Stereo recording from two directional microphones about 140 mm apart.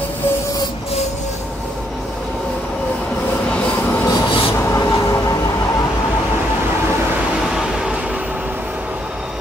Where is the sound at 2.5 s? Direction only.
5° left (ahead or behind).